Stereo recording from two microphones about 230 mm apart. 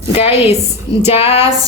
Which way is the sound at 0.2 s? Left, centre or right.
Left.